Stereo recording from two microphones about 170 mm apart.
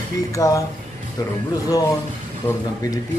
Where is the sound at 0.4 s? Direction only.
20° left (ahead or behind).